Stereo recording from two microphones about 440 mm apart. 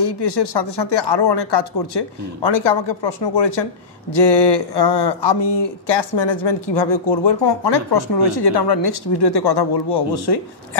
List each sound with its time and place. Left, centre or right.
0.0 s speech: left